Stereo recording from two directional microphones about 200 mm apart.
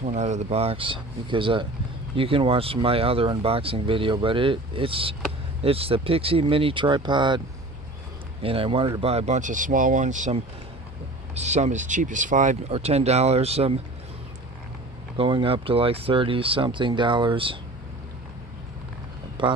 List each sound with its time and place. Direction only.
0.0 s speech: 35° right (ahead or behind)
15.1 s speech: 25° right (ahead or behind)
19.4 s speech: 25° right (ahead or behind)